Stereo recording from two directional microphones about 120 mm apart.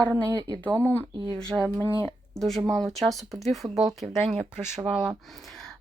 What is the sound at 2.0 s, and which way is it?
Speech, 5° left (ahead or behind).